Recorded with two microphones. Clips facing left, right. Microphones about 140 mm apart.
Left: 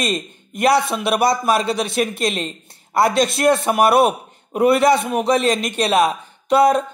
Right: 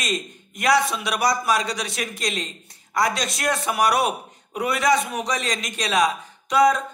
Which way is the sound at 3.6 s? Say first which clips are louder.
Left 3 dB; 55° left (ahead or behind).